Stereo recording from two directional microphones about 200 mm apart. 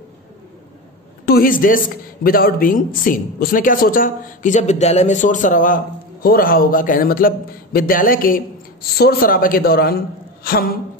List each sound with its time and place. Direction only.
1.2 s a man's voice: 45° left (ahead or behind)